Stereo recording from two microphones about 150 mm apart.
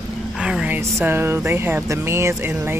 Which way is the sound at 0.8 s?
15° right (ahead or behind).